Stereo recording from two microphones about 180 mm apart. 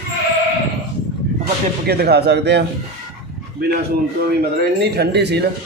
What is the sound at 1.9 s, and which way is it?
Speech, 65° right (ahead or behind).